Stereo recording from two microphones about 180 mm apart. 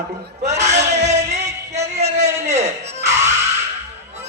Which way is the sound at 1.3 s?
40° right (ahead or behind).